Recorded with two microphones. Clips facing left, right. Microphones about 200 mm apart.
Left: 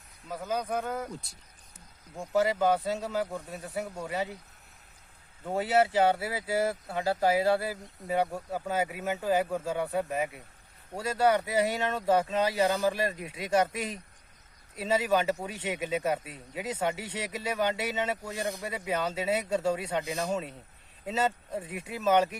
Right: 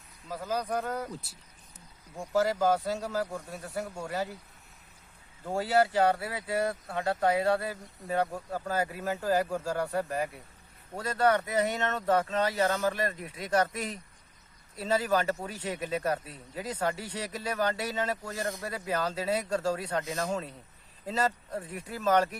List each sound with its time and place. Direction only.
0.3 s speech: centre (ahead or behind)
5.5 s speech: centre (ahead or behind)
13.2 s speech: 25° left (ahead or behind)
13.5 s speech: 10° left (ahead or behind)
17.0 s speech: 25° left (ahead or behind)
17.2 s speech: 5° left (ahead or behind)